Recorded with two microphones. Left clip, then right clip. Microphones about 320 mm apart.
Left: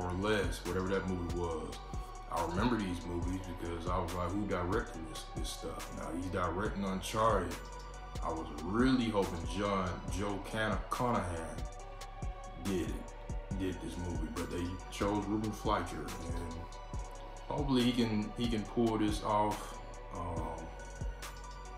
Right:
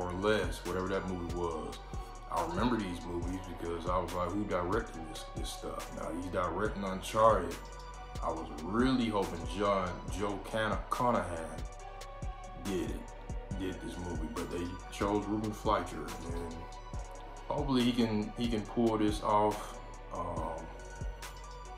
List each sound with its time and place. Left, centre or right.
0.0 s speech: centre
12.7 s speech: centre
17.6 s speech: centre
20.1 s music: centre